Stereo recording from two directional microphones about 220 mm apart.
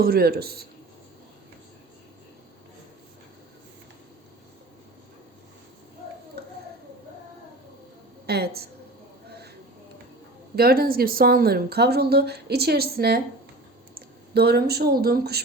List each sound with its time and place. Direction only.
0.0 s speech: 45° right (ahead or behind)
6.4 s a sound: 45° right (ahead or behind)
8.3 s speech: 45° right (ahead or behind)
10.5 s speech: 45° right (ahead or behind)
14.3 s speech: 45° right (ahead or behind)